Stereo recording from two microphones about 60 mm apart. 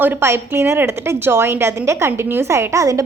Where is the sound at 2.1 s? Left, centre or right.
Right.